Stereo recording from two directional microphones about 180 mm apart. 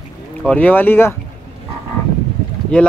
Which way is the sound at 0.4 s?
5° left (ahead or behind).